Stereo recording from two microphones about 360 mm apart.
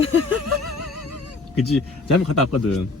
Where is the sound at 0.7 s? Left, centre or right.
Left.